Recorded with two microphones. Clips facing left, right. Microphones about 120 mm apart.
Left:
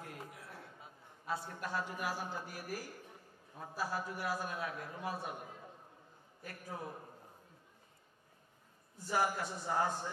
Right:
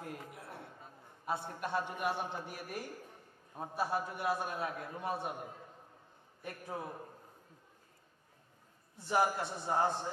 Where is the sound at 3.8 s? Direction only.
25° right (ahead or behind).